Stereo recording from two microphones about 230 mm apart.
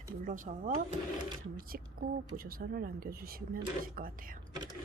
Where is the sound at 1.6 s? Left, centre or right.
Right.